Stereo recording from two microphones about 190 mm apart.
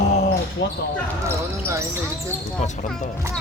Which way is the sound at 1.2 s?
15° right (ahead or behind).